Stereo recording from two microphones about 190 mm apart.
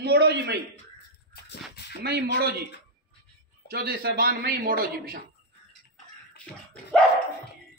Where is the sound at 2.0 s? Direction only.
55° right (ahead or behind).